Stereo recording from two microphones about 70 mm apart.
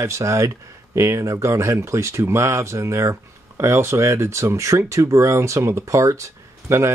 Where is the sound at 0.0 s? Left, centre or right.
Right.